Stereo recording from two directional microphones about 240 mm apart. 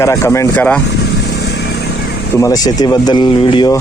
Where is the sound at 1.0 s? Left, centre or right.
Left.